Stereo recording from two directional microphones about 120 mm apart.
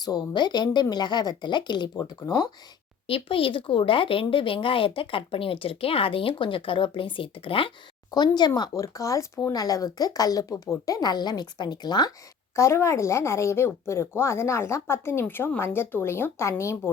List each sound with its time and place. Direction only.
0.0 s speech: 35° left (ahead or behind)
3.1 s speech: 50° left (ahead or behind)
8.1 s speech: 35° left (ahead or behind)
12.5 s speech: 25° left (ahead or behind)